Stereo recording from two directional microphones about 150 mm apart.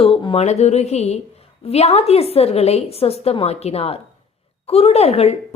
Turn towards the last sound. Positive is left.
turn(degrees=45)  # may be behind; listen again after turning